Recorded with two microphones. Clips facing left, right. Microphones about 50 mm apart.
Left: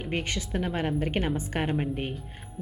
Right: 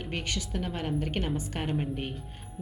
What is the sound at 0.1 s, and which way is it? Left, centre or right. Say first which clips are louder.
A woman's voice: left 4 dB; left.